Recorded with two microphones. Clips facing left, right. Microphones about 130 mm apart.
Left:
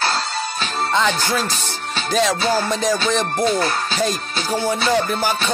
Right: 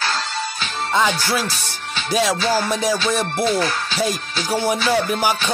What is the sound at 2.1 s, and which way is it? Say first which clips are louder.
Music: even; 5° right (ahead or behind).